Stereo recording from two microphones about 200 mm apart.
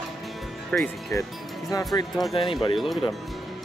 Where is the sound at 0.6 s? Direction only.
5° left (ahead or behind).